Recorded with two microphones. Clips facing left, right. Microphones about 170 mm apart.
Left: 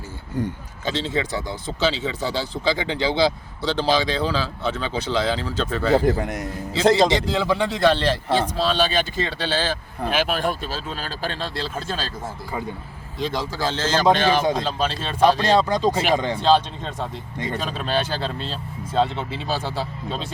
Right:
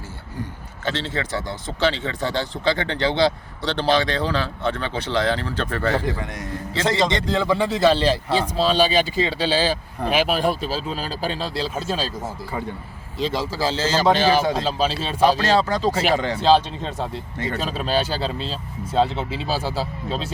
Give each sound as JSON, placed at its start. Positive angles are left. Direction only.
{"t": 0.9, "sound": "speech", "side_deg": 10}
{"t": 16.1, "sound": "speech", "side_deg": 15}
{"t": 16.4, "sound": "speech", "side_deg": -5}
{"t": 17.3, "sound": "speech", "side_deg": 15}
{"t": 17.6, "sound": "speech", "side_deg": -5}